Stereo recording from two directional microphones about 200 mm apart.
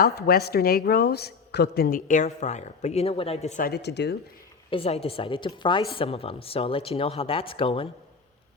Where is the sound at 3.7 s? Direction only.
55° left (ahead or behind).